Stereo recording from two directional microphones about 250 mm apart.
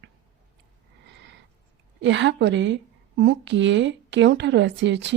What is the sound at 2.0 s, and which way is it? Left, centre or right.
A woman's voice, right.